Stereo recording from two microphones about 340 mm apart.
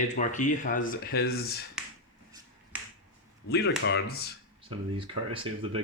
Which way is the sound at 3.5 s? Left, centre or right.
Left.